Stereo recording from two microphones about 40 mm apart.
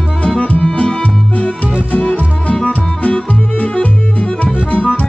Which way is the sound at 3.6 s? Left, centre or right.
Left.